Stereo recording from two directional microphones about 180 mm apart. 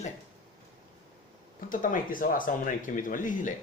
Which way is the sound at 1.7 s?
50° left (ahead or behind).